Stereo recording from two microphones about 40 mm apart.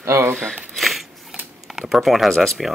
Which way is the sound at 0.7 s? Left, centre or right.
Centre.